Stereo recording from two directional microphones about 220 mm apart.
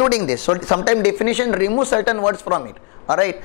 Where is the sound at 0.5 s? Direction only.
25° left (ahead or behind).